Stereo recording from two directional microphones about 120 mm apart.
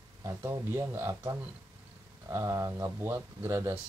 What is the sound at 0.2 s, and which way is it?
Speech, 25° right (ahead or behind).